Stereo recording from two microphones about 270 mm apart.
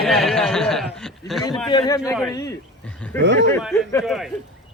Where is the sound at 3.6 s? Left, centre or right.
Centre.